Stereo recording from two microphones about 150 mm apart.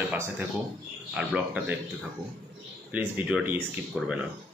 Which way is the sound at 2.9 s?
10° right (ahead or behind).